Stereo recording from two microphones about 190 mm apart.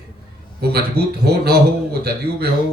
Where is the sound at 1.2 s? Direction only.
60° right (ahead or behind).